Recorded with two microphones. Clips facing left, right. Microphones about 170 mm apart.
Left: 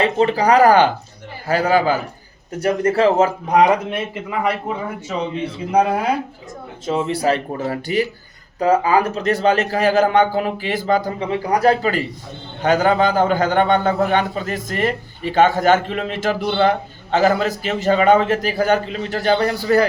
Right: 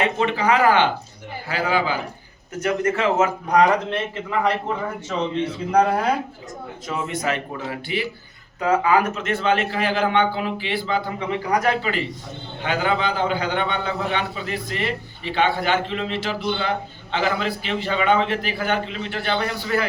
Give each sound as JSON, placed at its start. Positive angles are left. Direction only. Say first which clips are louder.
{"t": 0.0, "sound": "a man's voice", "louder": "left 5 dB", "side_deg": 35}
{"t": 2.6, "sound": "a man's voice", "louder": "left 5 dB", "side_deg": 35}
{"t": 3.5, "sound": "a man's voice", "louder": "left 2 dB", "side_deg": 10}
{"t": 6.8, "sound": "a man's voice", "louder": "left 7 dB", "side_deg": 30}
{"t": 11.3, "sound": "a man's voice", "louder": "left 5 dB", "side_deg": 30}